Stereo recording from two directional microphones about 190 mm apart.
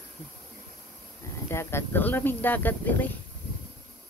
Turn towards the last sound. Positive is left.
turn(degrees=10)  # may be behind; listen again after turning